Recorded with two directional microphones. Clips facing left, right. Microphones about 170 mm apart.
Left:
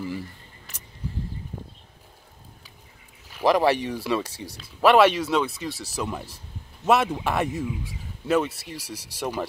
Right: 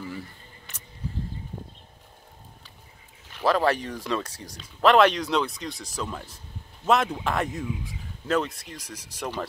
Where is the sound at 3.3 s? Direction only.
15° left (ahead or behind).